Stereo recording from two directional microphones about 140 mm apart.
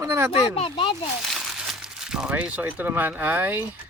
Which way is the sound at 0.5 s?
40° left (ahead or behind).